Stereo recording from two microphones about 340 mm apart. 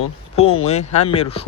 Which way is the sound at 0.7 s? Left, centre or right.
Centre.